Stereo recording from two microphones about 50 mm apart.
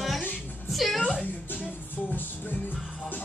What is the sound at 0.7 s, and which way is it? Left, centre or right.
Speech, centre.